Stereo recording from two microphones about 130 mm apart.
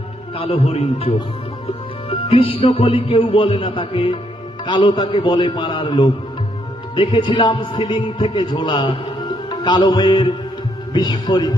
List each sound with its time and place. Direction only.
0.3 s a man's voice: 50° left (ahead or behind)
1.6 s music: 50° left (ahead or behind)
4.6 s a man's voice: 35° left (ahead or behind)